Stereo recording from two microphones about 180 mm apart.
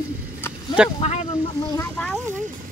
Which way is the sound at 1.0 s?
35° left (ahead or behind).